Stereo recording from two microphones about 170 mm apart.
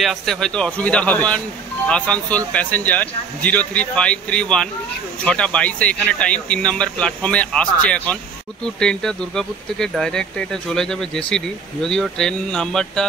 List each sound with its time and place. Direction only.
0.0 s a man's voice: centre (ahead or behind)